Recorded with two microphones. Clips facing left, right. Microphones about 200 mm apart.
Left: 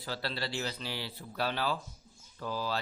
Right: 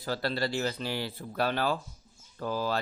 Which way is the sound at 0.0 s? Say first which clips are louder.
Right 6 dB; 45° right (ahead or behind).